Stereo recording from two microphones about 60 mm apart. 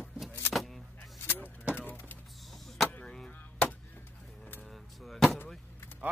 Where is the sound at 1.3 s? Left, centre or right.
Left.